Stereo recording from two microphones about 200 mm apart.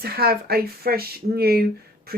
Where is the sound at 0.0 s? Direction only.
50° right (ahead or behind).